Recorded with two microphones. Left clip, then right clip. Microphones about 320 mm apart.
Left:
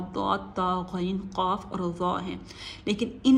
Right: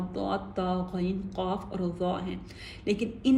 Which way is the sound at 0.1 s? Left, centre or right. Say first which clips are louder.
Left 5 dB; centre.